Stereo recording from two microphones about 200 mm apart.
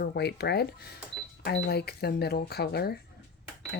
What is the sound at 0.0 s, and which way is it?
A woman's voice, 55° left (ahead or behind).